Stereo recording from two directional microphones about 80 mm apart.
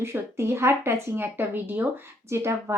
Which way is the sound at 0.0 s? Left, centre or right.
Right.